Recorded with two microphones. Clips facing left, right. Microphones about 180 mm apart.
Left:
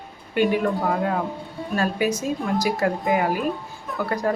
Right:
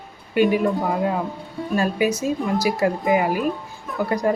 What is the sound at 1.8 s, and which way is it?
Music, 10° right (ahead or behind).